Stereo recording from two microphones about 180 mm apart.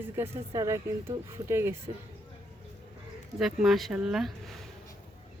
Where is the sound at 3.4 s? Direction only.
Centre (ahead or behind).